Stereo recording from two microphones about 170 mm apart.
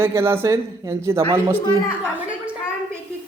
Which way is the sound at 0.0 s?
15° right (ahead or behind).